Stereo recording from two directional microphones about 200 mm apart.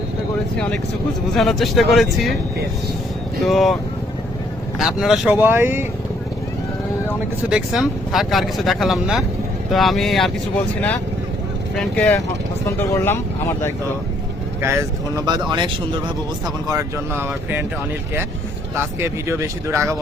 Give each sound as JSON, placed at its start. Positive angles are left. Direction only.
{"t": 1.4, "sound": "speech", "side_deg": 0}
{"t": 3.4, "sound": "speech", "side_deg": 0}
{"t": 4.8, "sound": "speech", "side_deg": 0}
{"t": 7.5, "sound": "speech", "side_deg": 0}
{"t": 11.8, "sound": "speech", "side_deg": 5}
{"t": 14.6, "sound": "speech", "side_deg": -15}
{"t": 18.8, "sound": "speech", "side_deg": -10}